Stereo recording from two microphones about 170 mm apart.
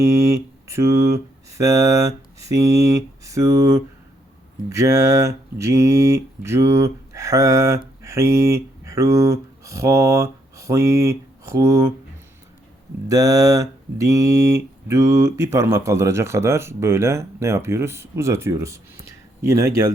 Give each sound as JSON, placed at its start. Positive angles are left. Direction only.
{"t": 0.0, "sound": "speech", "side_deg": -20}
{"t": 13.1, "sound": "speech", "side_deg": -20}